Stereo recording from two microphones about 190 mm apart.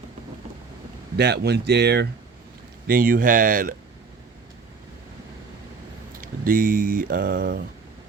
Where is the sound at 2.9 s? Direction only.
50° right (ahead or behind).